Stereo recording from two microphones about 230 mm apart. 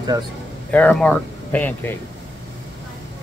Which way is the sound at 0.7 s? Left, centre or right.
Centre.